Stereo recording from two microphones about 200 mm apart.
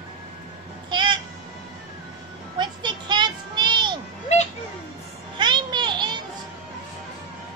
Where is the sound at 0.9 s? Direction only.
25° right (ahead or behind).